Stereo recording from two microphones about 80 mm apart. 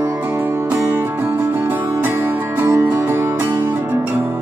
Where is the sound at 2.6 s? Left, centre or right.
Right.